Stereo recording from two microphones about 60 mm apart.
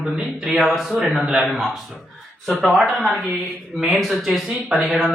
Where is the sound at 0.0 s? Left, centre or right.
Centre.